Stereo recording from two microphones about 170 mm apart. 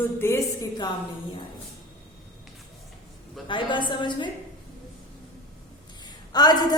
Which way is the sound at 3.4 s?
30° left (ahead or behind).